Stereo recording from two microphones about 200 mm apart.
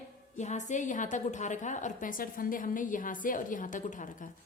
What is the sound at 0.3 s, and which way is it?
A woman's voice, 35° left (ahead or behind).